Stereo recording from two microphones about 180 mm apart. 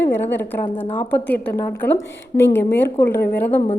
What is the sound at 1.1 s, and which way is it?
Speech, 15° left (ahead or behind).